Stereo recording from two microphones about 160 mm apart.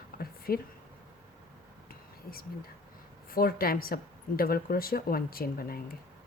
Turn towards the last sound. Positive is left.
turn(degrees=70)  # may be behind; listen again after turning